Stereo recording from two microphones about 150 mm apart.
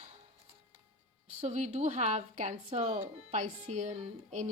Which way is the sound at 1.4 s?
50° right (ahead or behind).